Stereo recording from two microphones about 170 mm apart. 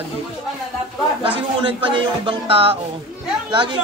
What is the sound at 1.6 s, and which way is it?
Speech, 30° right (ahead or behind).